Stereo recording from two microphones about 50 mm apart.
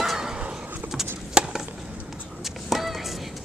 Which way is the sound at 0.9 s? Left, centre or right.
Centre.